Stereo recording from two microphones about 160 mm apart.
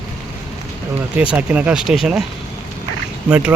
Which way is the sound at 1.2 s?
10° right (ahead or behind).